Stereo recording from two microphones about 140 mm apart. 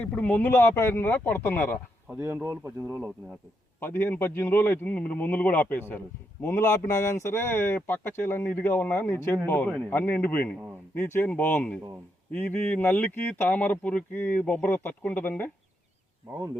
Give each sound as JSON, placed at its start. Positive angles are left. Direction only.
{"t": 0.0, "sound": "speech", "side_deg": 10}
{"t": 2.0, "sound": "speech", "side_deg": -15}
{"t": 3.8, "sound": "speech", "side_deg": 15}